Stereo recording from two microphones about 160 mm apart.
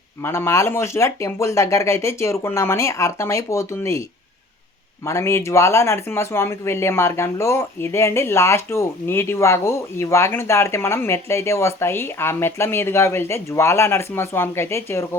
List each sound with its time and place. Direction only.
0.2 s speech: 15° left (ahead or behind)
5.0 s speech: 15° left (ahead or behind)